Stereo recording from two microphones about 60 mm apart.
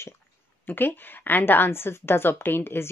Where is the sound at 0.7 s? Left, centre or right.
Left.